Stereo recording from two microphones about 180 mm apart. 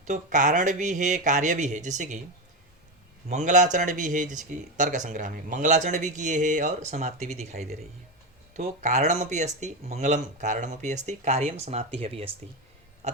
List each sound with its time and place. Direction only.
0.0 s speech: 45° right (ahead or behind)
3.2 s speech: 40° right (ahead or behind)